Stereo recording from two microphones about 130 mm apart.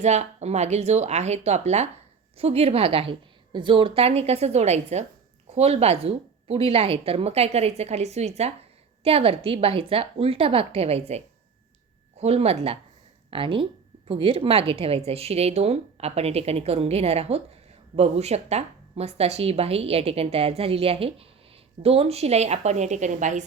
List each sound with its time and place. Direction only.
0.0 s a woman's voice: 60° right (ahead or behind)
12.2 s a woman's voice: 55° right (ahead or behind); by 23.4 s 70° right (ahead or behind)